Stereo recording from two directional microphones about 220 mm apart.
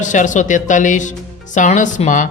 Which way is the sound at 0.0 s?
35° left (ahead or behind).